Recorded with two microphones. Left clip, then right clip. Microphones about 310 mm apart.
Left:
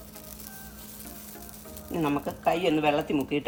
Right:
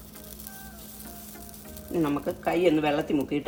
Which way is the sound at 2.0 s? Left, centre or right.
Left.